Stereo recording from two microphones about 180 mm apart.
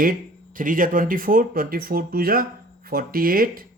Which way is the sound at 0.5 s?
50° right (ahead or behind).